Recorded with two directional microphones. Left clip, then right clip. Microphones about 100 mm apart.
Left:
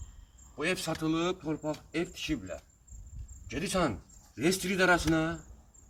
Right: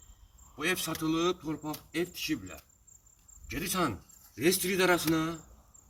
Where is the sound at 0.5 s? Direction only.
45° left (ahead or behind).